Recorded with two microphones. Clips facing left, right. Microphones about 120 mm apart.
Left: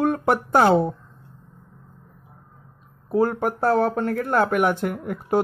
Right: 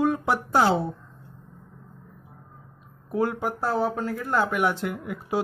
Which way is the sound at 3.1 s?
40° left (ahead or behind).